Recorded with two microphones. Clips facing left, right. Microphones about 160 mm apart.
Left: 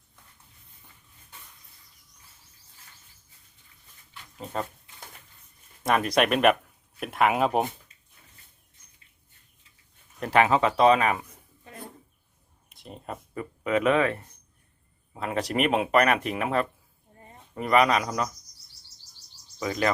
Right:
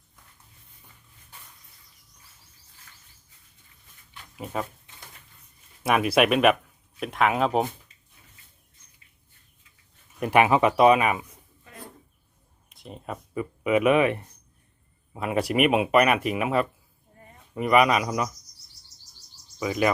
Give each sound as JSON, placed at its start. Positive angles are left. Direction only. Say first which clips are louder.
{"t": 5.8, "sound": "speech", "louder": "right 2 dB", "side_deg": -5}
{"t": 10.2, "sound": "speech", "louder": "right 2 dB", "side_deg": -15}
{"t": 12.6, "sound": "speech", "louder": "right 2 dB", "side_deg": 0}
{"t": 19.5, "sound": "speech", "louder": "right 3 dB", "side_deg": -10}